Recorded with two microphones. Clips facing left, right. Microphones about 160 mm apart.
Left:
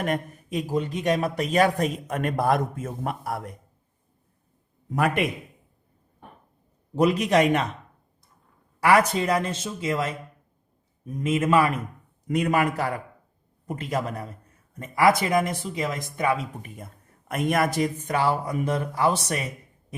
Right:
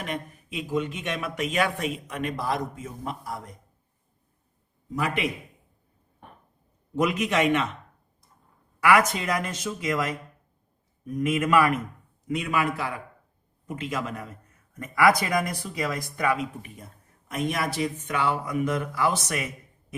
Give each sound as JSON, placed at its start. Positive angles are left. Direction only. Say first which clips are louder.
{"t": 0.0, "sound": "a man's voice", "louder": "left 6 dB", "side_deg": 45}
{"t": 4.9, "sound": "a man's voice", "louder": "left 4 dB", "side_deg": 55}
{"t": 6.9, "sound": "speech", "louder": "left 4 dB", "side_deg": 35}
{"t": 8.8, "sound": "speech", "louder": "left 2 dB", "side_deg": 30}
{"t": 12.3, "sound": "a man's voice", "louder": "left 4 dB", "side_deg": 40}
{"t": 17.2, "sound": "speech", "louder": "left 4 dB", "side_deg": 55}